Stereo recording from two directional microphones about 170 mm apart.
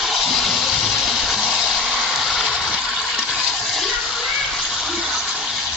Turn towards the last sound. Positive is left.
turn(degrees=0)  # may be behind; listen again after turning